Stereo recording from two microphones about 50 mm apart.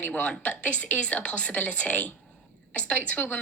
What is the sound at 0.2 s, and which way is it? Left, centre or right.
Speech, left.